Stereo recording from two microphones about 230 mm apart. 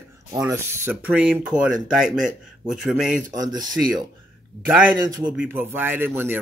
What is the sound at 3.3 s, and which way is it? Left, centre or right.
Speech, centre.